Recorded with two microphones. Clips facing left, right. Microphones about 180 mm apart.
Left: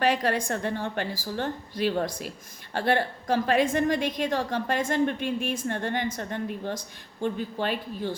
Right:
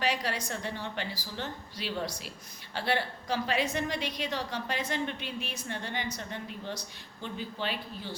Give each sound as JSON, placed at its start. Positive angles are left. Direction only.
{"t": 0.0, "sound": "a woman's voice", "side_deg": 50}